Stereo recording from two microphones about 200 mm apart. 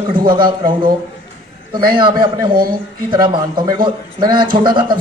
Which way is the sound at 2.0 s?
20° right (ahead or behind).